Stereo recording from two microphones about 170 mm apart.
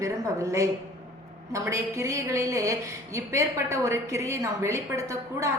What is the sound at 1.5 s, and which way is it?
A woman's voice, 15° right (ahead or behind).